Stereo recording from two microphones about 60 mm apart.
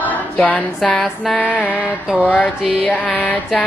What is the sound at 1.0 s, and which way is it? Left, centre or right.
Mantra, centre.